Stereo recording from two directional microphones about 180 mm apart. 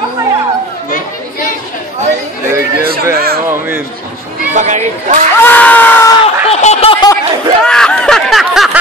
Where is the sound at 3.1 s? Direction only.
55° right (ahead or behind).